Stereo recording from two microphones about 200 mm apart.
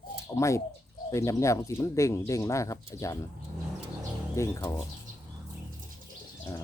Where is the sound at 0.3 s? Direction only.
15° left (ahead or behind).